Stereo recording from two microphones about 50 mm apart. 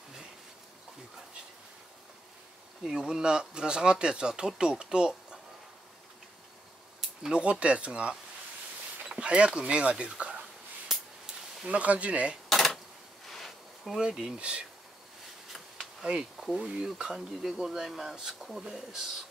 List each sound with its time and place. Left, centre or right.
2.8 s speech: centre
7.0 s a sound: centre
7.6 s speech: right
9.1 s a sound: right
9.6 s speech: right
11.6 s speech: right
12.4 s dishes: centre
13.3 s a sound: centre
13.9 s speech: centre
15.5 s bee: centre
16.5 s speech: centre